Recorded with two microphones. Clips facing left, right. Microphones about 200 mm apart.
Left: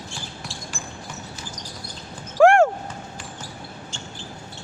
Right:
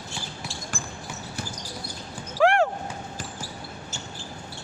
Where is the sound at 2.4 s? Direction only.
45° left (ahead or behind).